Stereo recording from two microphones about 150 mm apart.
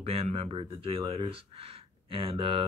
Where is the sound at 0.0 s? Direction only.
40° right (ahead or behind).